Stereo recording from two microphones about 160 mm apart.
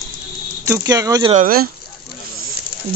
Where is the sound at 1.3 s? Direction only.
60° right (ahead or behind).